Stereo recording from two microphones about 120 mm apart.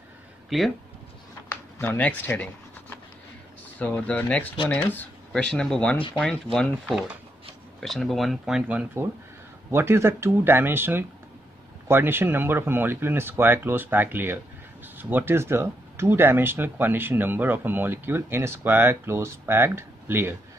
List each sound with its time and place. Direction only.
0.5 s speech: centre (ahead or behind)
1.5 s a sound: 15° left (ahead or behind)
3.8 s speech: 15° left (ahead or behind); by 8.8 s 5° right (ahead or behind)
9.7 s speech: 20° right (ahead or behind)